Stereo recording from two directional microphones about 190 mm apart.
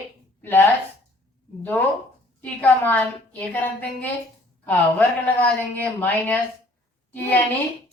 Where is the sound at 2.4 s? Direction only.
10° left (ahead or behind).